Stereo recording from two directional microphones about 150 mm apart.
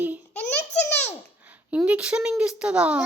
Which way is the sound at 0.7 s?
45° left (ahead or behind).